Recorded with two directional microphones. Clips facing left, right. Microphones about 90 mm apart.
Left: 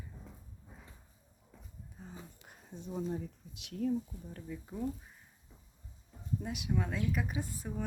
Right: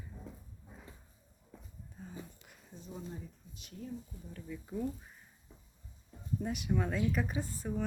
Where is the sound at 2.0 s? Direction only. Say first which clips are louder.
Right 2 dB; 15° left (ahead or behind).